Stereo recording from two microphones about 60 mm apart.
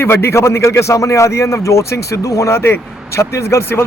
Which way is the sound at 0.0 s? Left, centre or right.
Left.